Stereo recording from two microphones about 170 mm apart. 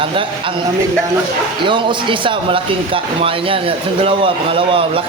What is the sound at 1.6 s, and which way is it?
A man's voice, 30° right (ahead or behind).